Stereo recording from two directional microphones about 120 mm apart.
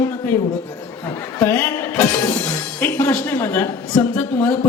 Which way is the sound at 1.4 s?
20° left (ahead or behind).